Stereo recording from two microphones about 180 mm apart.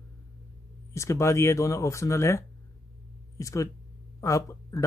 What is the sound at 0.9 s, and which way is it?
Speech, 15° left (ahead or behind).